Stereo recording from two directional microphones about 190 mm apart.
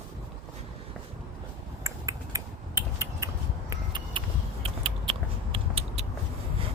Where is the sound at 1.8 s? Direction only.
15° right (ahead or behind).